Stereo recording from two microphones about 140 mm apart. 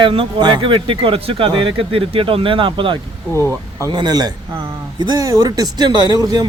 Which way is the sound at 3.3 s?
20° left (ahead or behind).